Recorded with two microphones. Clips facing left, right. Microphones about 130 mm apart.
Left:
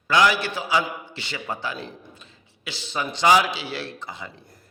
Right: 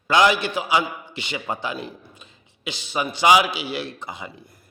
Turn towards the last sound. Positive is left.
turn(degrees=-15)  # may be behind; listen again after turning